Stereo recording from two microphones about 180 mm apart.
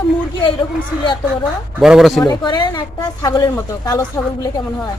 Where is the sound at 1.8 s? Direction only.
Centre (ahead or behind).